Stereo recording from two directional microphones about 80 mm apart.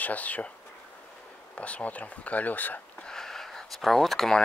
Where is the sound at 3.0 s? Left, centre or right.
Centre.